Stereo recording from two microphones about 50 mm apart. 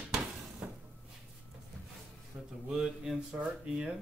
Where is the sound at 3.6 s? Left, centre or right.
Right.